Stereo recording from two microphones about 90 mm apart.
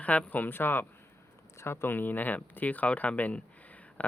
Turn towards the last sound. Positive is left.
turn(degrees=15)  # may be behind; listen again after turning